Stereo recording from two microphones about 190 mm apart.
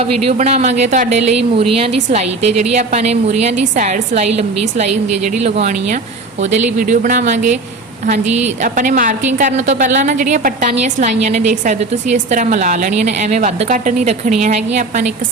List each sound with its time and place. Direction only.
0.0 s a woman's voice: 30° right (ahead or behind)
8.6 s a woman's voice: 45° right (ahead or behind)